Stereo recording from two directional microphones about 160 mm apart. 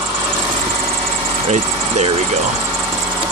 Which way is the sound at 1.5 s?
45° right (ahead or behind).